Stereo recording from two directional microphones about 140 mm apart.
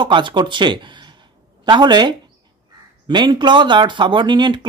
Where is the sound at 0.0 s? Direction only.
35° right (ahead or behind).